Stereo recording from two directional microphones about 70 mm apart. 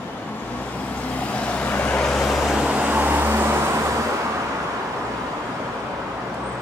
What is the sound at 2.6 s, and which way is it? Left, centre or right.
Vehicle, centre.